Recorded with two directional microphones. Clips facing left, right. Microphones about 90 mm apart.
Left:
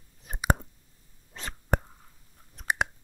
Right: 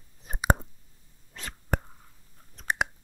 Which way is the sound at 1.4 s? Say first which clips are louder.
Left 1 dB; 25° left (ahead or behind).